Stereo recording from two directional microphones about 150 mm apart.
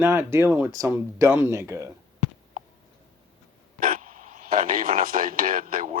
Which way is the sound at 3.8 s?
65° right (ahead or behind).